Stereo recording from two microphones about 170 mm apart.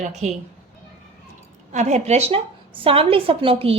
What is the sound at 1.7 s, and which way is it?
A woman's voice, 40° right (ahead or behind).